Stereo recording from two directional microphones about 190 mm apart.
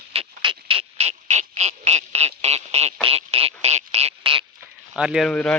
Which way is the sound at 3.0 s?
30° right (ahead or behind).